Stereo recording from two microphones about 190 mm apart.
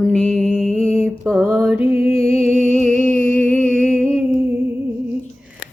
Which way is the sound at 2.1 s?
30° left (ahead or behind).